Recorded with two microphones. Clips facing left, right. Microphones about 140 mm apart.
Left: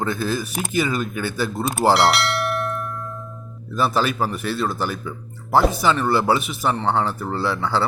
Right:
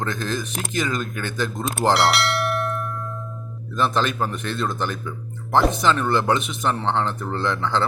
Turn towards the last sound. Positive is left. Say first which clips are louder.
# left 1 dB
turn(degrees=5)  # may be behind; listen again after turning